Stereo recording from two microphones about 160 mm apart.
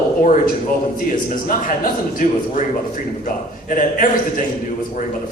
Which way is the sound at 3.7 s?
55° left (ahead or behind).